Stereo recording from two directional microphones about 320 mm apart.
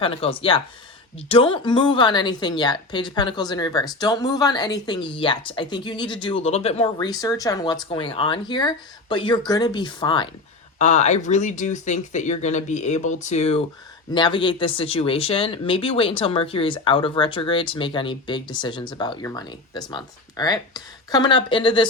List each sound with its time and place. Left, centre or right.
0.0 s speech: centre